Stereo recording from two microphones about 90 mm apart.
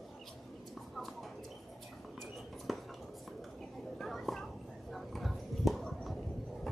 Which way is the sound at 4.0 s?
Centre (ahead or behind).